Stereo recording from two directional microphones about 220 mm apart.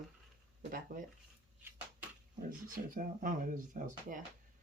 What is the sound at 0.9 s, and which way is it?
Speech, 40° right (ahead or behind).